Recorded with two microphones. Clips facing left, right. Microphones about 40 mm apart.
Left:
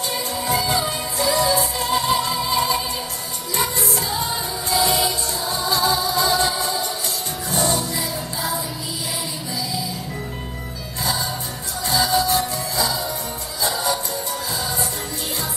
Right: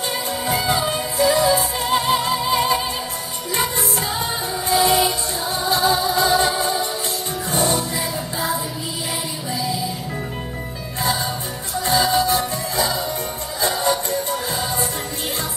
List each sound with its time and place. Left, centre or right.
0.3 s music: right
11.8 s music: right